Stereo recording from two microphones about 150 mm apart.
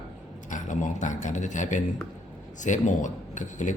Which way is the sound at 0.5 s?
55° left (ahead or behind).